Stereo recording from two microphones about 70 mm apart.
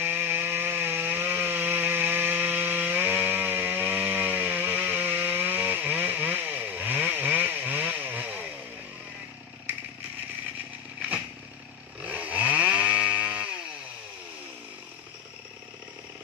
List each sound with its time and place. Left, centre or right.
0.0 s chainsaw: right
12.0 s chainsaw: right